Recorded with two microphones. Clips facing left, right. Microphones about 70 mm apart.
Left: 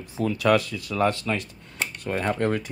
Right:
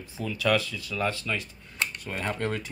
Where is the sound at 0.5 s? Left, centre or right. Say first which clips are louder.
Left 5 dB; left.